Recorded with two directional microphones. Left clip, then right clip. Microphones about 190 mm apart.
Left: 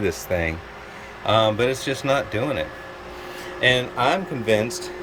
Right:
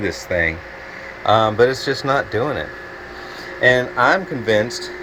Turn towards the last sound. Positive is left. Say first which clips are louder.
# right 3 dB
turn(degrees=5)  # may be behind; listen again after turning